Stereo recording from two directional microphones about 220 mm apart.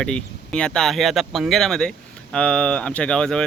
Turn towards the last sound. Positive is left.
turn(degrees=5)  # may be behind; listen again after turning